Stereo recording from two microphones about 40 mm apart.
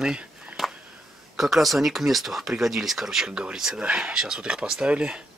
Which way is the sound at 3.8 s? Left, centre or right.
Right.